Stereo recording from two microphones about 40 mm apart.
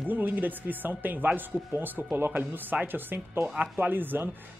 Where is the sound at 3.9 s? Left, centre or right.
Right.